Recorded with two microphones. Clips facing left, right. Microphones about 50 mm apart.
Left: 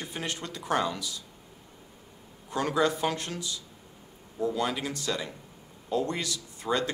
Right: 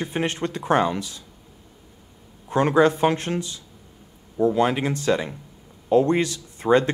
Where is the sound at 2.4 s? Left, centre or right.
Right.